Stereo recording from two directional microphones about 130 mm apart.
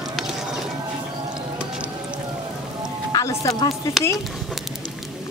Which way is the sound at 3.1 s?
30° left (ahead or behind).